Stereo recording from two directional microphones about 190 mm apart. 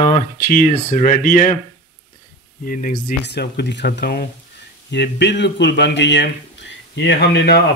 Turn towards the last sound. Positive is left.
turn(degrees=60)  # may be behind; listen again after turning